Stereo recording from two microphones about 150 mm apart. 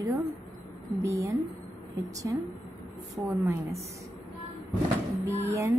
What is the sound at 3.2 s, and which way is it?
Speech, 15° right (ahead or behind).